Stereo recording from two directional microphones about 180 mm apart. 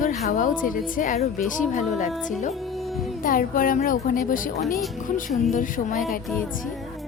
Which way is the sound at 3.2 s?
50° left (ahead or behind).